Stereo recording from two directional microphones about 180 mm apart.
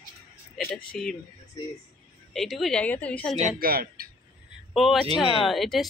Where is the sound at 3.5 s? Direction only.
55° right (ahead or behind).